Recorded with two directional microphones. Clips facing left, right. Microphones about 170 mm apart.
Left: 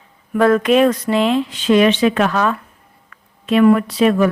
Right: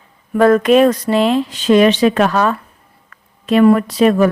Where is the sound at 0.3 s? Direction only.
40° right (ahead or behind).